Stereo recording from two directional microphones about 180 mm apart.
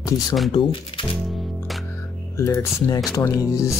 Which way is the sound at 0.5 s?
30° left (ahead or behind).